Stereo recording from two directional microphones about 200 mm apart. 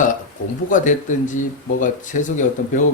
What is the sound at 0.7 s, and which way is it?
Speech, 40° left (ahead or behind).